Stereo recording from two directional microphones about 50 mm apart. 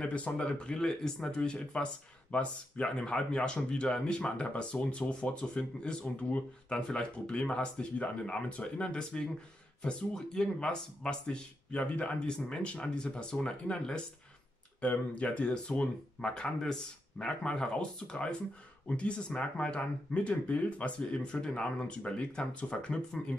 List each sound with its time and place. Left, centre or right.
0.0 s speech: left